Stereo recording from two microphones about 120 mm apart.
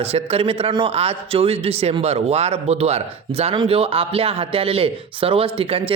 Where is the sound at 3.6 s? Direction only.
50° right (ahead or behind).